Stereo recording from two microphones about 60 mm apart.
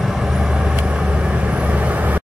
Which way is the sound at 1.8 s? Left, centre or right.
Right.